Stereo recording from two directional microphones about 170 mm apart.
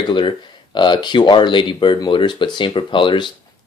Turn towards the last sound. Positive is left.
turn(degrees=30)  # may be behind; listen again after turning